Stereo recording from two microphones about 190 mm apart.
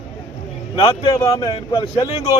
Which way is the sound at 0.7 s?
25° left (ahead or behind).